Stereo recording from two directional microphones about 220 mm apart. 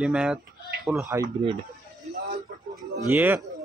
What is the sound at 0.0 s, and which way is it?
A man's voice, 5° right (ahead or behind).